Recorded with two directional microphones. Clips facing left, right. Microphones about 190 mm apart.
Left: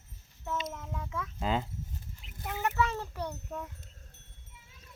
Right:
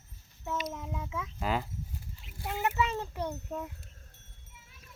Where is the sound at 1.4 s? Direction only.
25° left (ahead or behind).